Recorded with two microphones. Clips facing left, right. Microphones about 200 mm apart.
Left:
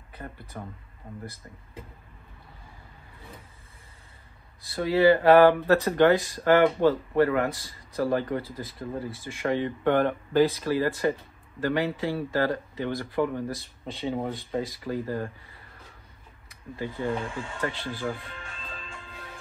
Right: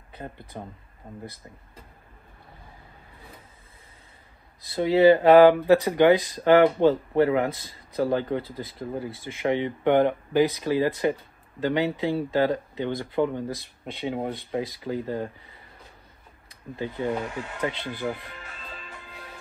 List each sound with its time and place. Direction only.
0.2 s speech: 15° right (ahead or behind)
4.6 s speech: 25° right (ahead or behind)
16.4 s speech: 25° right (ahead or behind)